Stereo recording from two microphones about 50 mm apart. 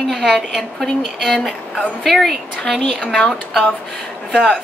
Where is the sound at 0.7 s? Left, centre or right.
Centre.